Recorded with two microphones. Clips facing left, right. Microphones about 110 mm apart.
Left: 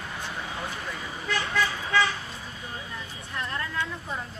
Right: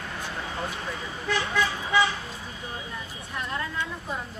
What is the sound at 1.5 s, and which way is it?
Vehicle, 20° right (ahead or behind).